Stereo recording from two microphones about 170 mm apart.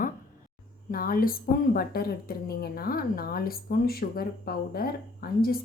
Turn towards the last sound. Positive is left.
turn(degrees=60)  # may be behind; listen again after turning